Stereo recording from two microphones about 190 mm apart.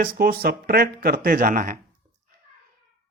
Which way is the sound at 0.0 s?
50° right (ahead or behind).